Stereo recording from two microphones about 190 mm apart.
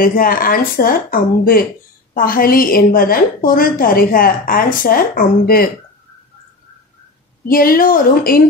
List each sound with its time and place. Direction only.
0.0 s a woman's voice: 50° left (ahead or behind)
7.4 s a woman's voice: 50° left (ahead or behind)